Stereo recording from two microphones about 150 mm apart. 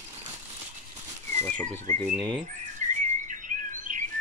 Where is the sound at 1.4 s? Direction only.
10° left (ahead or behind).